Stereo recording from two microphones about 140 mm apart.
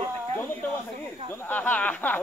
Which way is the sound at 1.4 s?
10° left (ahead or behind).